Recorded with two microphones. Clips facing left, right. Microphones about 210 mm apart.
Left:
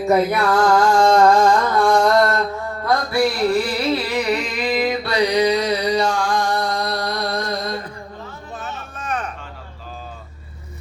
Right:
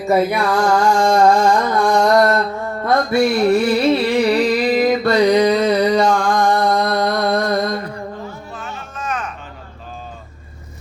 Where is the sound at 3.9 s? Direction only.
30° right (ahead or behind); by 7.7 s 55° right (ahead or behind).